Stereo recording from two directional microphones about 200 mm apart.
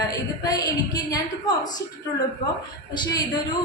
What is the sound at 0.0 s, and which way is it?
A woman's voice, 20° left (ahead or behind).